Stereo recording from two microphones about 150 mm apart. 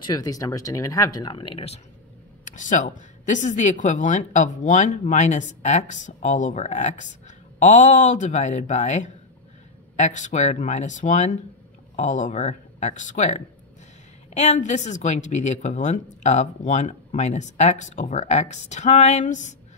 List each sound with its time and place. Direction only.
0.0 s speech: 25° left (ahead or behind)
2.4 s speech: 60° left (ahead or behind)